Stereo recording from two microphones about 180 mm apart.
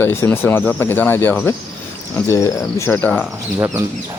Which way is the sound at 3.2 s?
15° right (ahead or behind).